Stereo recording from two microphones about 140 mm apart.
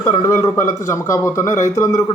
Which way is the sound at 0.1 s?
25° left (ahead or behind).